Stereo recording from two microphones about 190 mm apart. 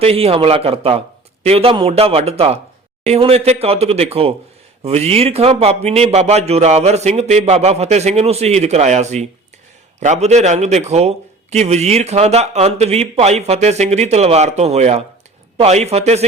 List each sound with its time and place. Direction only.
0.0 s speech: 30° right (ahead or behind)